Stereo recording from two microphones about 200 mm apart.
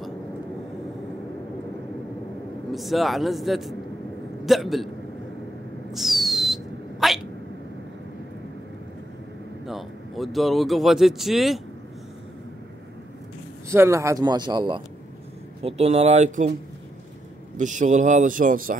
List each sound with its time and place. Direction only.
2.7 s speech: centre (ahead or behind)
5.9 s a sound: centre (ahead or behind)
9.7 s speech: centre (ahead or behind)
13.7 s speech: 15° right (ahead or behind)
15.6 s speech: 30° right (ahead or behind)
17.6 s speech: 40° right (ahead or behind)